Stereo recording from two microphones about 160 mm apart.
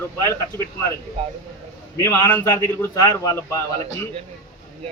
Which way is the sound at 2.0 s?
20° left (ahead or behind).